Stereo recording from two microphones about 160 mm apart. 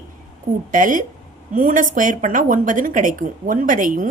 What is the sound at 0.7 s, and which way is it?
A woman's voice, 55° right (ahead or behind).